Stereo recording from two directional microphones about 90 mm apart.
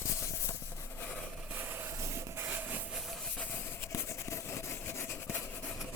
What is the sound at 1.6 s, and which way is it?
Train, 25° right (ahead or behind).